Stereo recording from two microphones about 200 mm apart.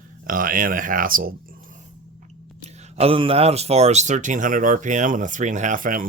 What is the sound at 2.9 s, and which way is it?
Speech, 30° right (ahead or behind).